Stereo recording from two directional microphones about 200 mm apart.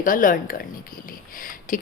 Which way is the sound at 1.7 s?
40° left (ahead or behind).